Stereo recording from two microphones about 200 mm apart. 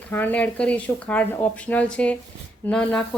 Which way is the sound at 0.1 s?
10° left (ahead or behind).